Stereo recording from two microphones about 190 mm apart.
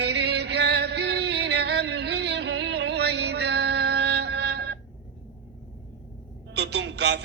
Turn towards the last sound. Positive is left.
turn(degrees=-65)  # may be behind; listen again after turning